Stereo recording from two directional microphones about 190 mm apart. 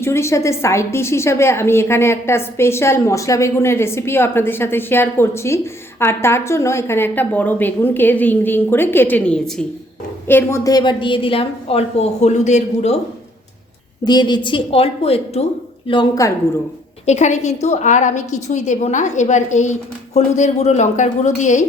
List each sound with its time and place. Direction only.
0.0 s a woman's voice: 15° left (ahead or behind); by 13.0 s 35° left (ahead or behind)
14.0 s a woman's voice: 20° left (ahead or behind)
15.9 s a woman's voice: 20° left (ahead or behind)
17.1 s a woman's voice: 40° left (ahead or behind)